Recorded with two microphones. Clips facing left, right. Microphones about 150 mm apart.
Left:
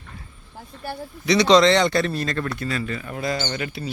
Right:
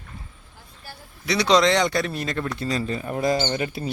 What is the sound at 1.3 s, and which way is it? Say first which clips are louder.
Speech: left 3 dB; 10° right (ahead or behind).